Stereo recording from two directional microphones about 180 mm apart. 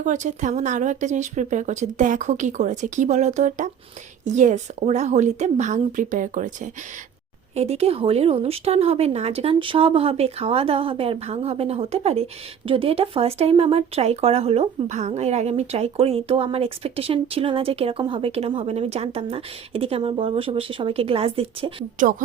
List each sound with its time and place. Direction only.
0.0 s a woman's voice: 40° right (ahead or behind)